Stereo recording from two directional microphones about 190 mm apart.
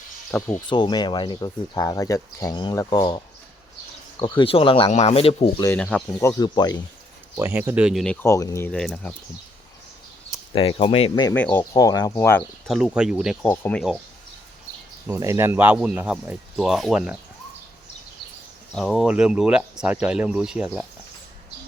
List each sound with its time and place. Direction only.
0.3 s speech: 10° left (ahead or behind)
0.7 s speech: 25° left (ahead or behind)
4.2 s speech: 30° left (ahead or behind)
5.6 s speech: 10° left (ahead or behind)
7.3 s speech: 15° right (ahead or behind); by 9.1 s 5° left (ahead or behind)
10.5 s speech: 30° left (ahead or behind)
11.3 s speech: 10° left (ahead or behind)
11.8 s speech: 20° left (ahead or behind)
12.6 s speech: centre (ahead or behind)
13.5 s speech: 10° left (ahead or behind)
15.0 s speech: 15° right (ahead or behind)
18.7 s speech: centre (ahead or behind)